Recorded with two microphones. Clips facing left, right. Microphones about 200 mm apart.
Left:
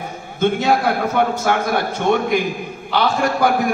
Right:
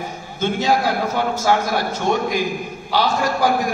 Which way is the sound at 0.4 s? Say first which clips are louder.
Left 2 dB; 60° left (ahead or behind).